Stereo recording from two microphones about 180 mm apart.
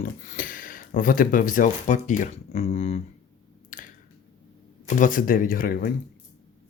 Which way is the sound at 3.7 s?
45° left (ahead or behind).